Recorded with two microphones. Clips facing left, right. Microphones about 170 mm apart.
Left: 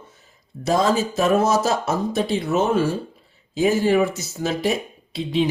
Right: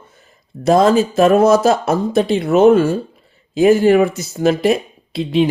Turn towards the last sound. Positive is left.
turn(degrees=-65)  # may be behind; listen again after turning